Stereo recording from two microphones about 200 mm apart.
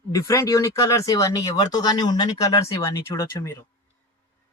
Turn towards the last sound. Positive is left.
turn(degrees=15)  # may be behind; listen again after turning